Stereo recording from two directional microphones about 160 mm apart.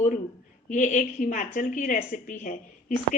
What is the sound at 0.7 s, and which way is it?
A woman's voice, 50° left (ahead or behind).